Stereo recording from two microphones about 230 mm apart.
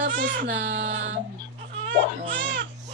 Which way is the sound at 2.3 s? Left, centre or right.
Right.